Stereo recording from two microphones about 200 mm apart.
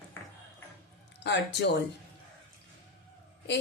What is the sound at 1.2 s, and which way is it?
Speech, 60° left (ahead or behind).